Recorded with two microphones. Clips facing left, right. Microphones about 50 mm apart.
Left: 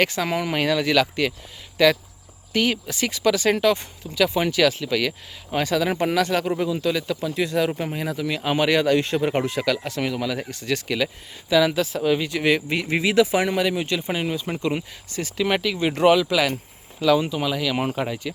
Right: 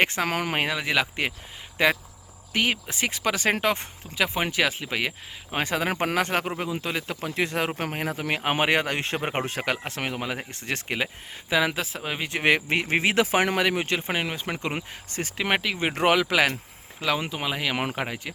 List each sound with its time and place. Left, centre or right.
0.0 s speech: right
0.3 s speech: right
0.5 s speech: right
17.7 s speech: right
18.0 s speech: right